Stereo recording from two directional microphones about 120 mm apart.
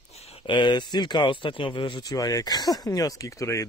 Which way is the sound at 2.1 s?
30° left (ahead or behind).